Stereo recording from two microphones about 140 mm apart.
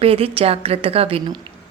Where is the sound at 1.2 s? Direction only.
30° right (ahead or behind).